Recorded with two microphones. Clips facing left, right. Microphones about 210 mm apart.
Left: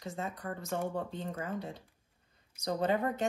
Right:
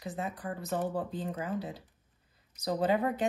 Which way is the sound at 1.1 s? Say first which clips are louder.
Right 3 dB; 5° right (ahead or behind).